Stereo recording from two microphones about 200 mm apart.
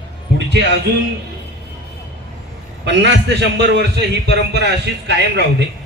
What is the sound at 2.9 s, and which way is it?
A man's voice, 60° right (ahead or behind).